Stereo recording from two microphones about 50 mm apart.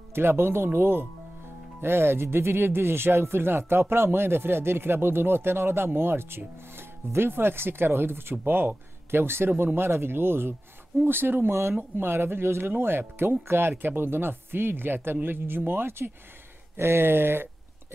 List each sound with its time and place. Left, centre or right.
0.1 s speech: right